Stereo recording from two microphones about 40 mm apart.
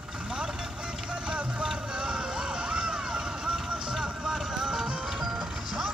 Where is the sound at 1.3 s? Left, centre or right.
Right.